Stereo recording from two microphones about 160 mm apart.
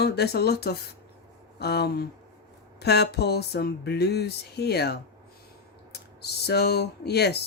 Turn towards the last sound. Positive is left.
turn(degrees=90)